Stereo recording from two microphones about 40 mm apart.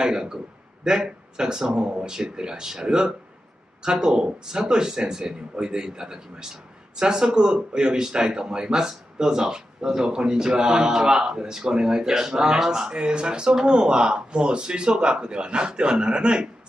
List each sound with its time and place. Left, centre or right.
0.0 s speech: centre